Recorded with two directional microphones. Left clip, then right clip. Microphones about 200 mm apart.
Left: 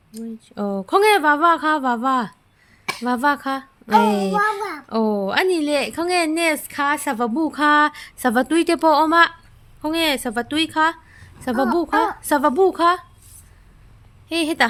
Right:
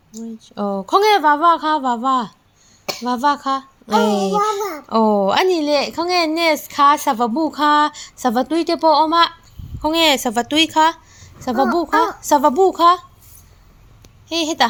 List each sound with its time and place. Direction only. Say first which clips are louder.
0.3 s a child's voice: right 3 dB; 15° left (ahead or behind); by 5.5 s centre (ahead or behind)
5.5 s a child's voice: right 3 dB; 15° left (ahead or behind)
9.8 s a woman's voice: right 5 dB; 5° left (ahead or behind)
14.3 s a child's voice: right 2 dB; 20° left (ahead or behind)